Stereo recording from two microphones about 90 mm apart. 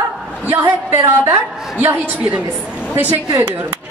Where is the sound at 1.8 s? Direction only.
20° right (ahead or behind).